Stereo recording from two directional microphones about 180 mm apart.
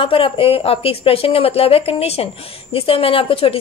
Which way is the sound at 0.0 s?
30° left (ahead or behind).